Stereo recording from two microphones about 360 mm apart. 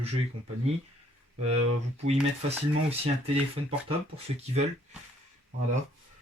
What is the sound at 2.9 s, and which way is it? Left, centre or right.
Speech, centre.